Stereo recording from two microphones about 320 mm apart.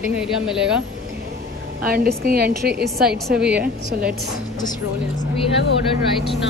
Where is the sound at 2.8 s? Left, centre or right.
Centre.